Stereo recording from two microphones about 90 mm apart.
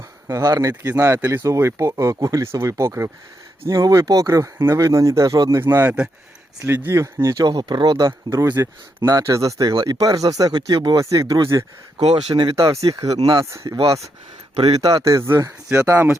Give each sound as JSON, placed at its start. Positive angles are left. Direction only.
{"t": 0.3, "sound": "speech", "side_deg": -35}
{"t": 4.5, "sound": "speech", "side_deg": -25}
{"t": 4.8, "sound": "speech", "side_deg": -35}
{"t": 5.5, "sound": "speech", "side_deg": -25}
{"t": 6.9, "sound": "speech", "side_deg": -35}
{"t": 7.4, "sound": "speech", "side_deg": -55}
{"t": 11.0, "sound": "speech", "side_deg": -40}
{"t": 12.0, "sound": "speech", "side_deg": -60}
{"t": 12.5, "sound": "speech", "side_deg": -35}
{"t": 15.0, "sound": "speech", "side_deg": -35}